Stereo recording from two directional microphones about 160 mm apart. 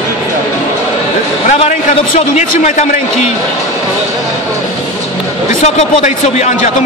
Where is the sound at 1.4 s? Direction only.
45° left (ahead or behind).